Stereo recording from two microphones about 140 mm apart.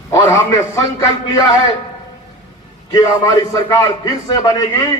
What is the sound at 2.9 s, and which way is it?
A man's voice, 25° left (ahead or behind).